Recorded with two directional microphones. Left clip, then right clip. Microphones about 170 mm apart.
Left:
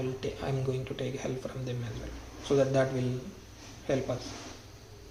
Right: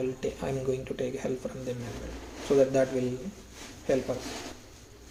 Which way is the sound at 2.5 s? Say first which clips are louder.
Right 3 dB; 35° right (ahead or behind).